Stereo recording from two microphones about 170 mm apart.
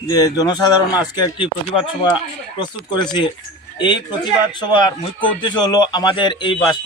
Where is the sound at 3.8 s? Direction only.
25° left (ahead or behind).